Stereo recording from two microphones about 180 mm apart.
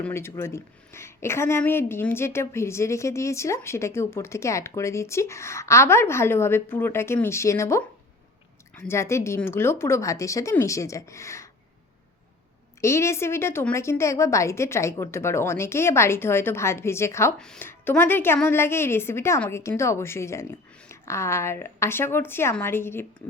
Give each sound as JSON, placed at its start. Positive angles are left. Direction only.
{"t": 0.0, "sound": "a woman's voice", "side_deg": 15}
{"t": 8.9, "sound": "a woman's voice", "side_deg": 15}
{"t": 12.8, "sound": "a woman's voice", "side_deg": 15}
{"t": 17.3, "sound": "a woman's voice", "side_deg": 5}